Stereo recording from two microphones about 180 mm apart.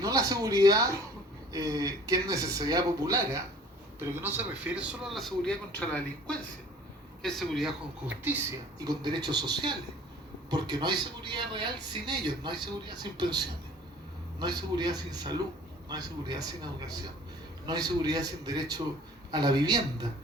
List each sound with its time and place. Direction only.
0.0 s a man's voice: 20° right (ahead or behind); by 8.1 s centre (ahead or behind)
8.8 s speech: 20° right (ahead or behind)